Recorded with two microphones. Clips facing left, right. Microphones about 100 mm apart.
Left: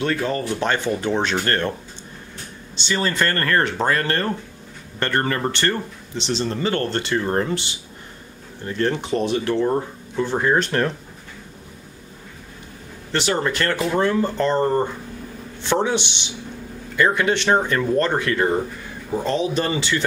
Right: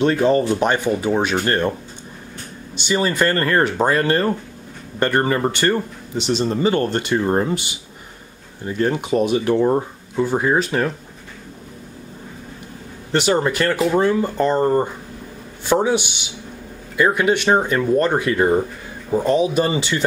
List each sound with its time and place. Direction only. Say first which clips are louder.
0.0 s speech: right 7 dB; 25° right (ahead or behind); by 11.0 s 5° right (ahead or behind)
13.1 s speech: right 4 dB; 20° right (ahead or behind)